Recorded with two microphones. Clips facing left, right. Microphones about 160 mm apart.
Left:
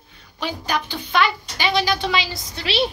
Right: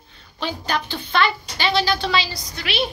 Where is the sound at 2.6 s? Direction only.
30° left (ahead or behind).